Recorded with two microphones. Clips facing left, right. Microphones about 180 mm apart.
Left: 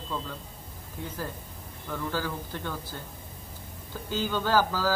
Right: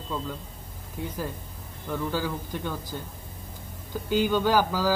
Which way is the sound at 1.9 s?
15° right (ahead or behind).